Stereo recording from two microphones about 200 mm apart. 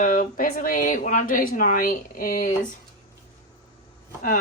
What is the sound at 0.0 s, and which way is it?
Speech, 45° left (ahead or behind).